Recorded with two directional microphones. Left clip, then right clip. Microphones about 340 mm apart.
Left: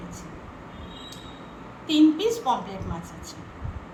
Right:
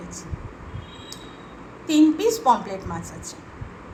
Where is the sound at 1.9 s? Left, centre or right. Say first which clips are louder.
Right 2 dB; right.